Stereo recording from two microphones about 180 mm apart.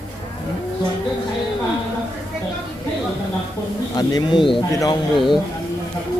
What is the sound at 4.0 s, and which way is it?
Speech, 25° left (ahead or behind).